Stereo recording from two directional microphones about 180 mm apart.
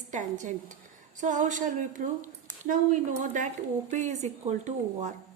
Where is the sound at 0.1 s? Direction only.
45° right (ahead or behind).